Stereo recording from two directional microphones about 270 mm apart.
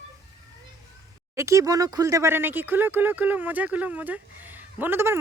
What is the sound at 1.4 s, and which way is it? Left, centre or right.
Speech, centre.